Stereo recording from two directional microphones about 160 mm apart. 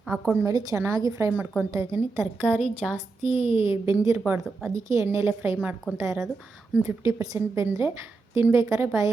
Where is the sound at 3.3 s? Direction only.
35° left (ahead or behind).